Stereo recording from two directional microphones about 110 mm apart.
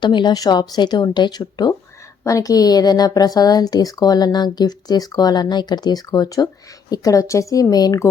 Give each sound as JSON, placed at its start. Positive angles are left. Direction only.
{"t": 0.0, "sound": "a woman's voice", "side_deg": 45}